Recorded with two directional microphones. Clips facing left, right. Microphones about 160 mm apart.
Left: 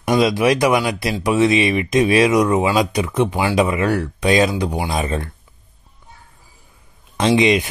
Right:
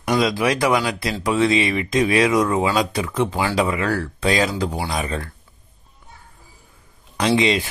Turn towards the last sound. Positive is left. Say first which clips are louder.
# left 3 dB
turn(degrees=20)  # may be behind; listen again after turning